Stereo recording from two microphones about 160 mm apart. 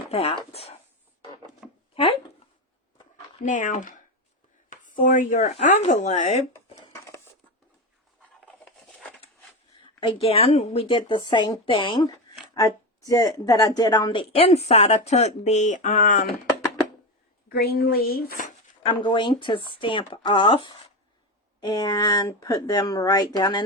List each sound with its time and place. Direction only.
0.1 s speech: 40° left (ahead or behind)
1.6 s a sound: 5° right (ahead or behind)
3.4 s speech: 50° left (ahead or behind)
10.0 s speech: 35° left (ahead or behind); by 16.2 s 55° left (ahead or behind)
17.5 s speech: 75° left (ahead or behind)
18.9 s speech: 30° left (ahead or behind)